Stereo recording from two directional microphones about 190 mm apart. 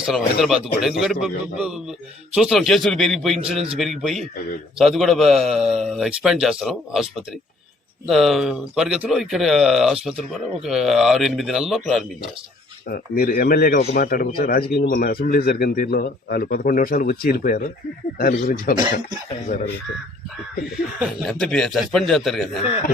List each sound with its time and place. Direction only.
0.0 s a man's voice: centre (ahead or behind)
12.9 s speech: 50° left (ahead or behind)
21.0 s a man's voice: centre (ahead or behind)